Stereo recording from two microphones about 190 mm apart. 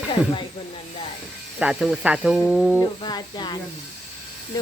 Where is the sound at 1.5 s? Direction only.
5° right (ahead or behind).